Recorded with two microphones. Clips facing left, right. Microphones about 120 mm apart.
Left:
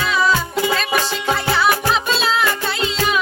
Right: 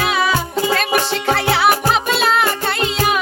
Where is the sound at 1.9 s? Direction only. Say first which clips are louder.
Right 2 dB; 60° right (ahead or behind).